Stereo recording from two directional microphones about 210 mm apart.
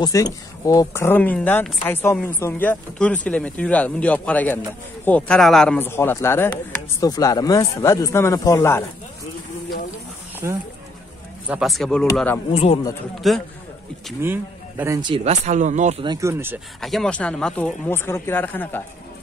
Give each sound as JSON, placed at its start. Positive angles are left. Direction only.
{"t": 0.0, "sound": "speech", "side_deg": 15}
{"t": 11.4, "sound": "speech", "side_deg": -5}
{"t": 13.2, "sound": "speech", "side_deg": 0}
{"t": 14.2, "sound": "speech", "side_deg": -10}
{"t": 16.1, "sound": "speech", "side_deg": -15}
{"t": 16.8, "sound": "speech", "side_deg": 0}